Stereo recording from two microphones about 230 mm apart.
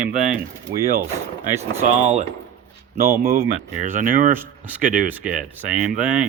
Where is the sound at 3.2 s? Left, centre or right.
Right.